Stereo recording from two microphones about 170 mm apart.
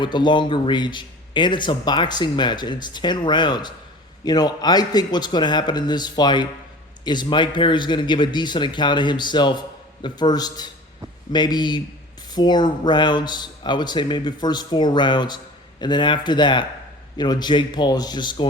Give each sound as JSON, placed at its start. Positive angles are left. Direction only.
{"t": 0.0, "sound": "speech", "side_deg": 25}